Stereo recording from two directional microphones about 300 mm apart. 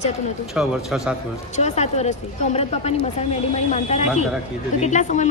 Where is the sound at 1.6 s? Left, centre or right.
Left.